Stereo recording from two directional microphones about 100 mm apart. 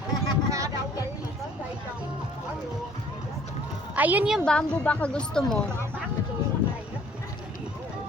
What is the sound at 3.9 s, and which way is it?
Speech, 15° right (ahead or behind).